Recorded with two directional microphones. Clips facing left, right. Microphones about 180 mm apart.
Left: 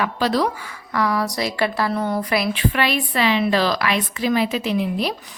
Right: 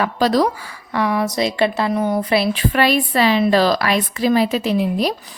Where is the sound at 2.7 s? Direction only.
40° right (ahead or behind).